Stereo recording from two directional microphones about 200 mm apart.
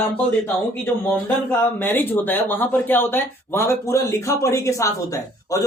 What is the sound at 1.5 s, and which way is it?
Speech, 10° left (ahead or behind).